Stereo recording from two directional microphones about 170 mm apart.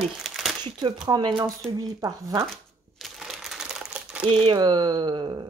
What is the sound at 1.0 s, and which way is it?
Speech, 25° right (ahead or behind).